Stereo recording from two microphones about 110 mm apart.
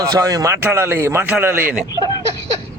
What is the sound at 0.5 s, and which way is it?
A man's voice, 20° right (ahead or behind).